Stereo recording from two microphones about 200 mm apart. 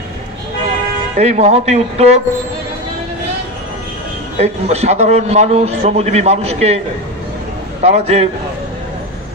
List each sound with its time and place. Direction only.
1.1 s a man's voice: 35° right (ahead or behind)
4.4 s a man's voice: 35° right (ahead or behind)
7.8 s a man's voice: 30° right (ahead or behind)